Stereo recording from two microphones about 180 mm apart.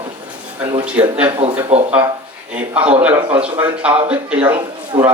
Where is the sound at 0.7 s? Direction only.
30° right (ahead or behind).